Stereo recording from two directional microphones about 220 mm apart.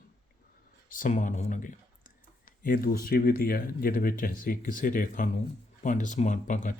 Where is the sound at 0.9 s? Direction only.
35° left (ahead or behind).